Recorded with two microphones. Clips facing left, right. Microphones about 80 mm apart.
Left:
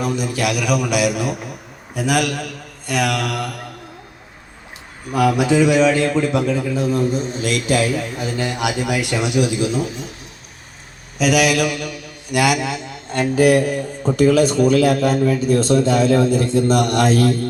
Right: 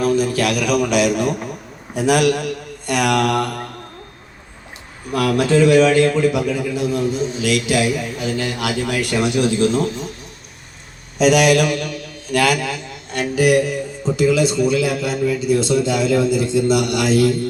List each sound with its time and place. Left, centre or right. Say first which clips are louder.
0.0 s a man's voice: right 4 dB; centre
5.1 s a man's voice: even; centre; by 8.3 s left
8.4 s speech: left 3 dB; left
11.2 s a man's voice: right 3 dB; centre; by 13.0 s left
13.1 s a man's voice: left 2 dB; left